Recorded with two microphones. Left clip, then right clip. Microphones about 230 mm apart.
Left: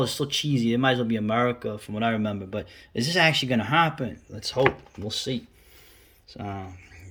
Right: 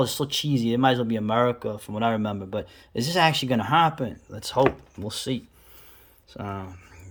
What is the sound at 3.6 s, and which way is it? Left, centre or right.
Speech, centre.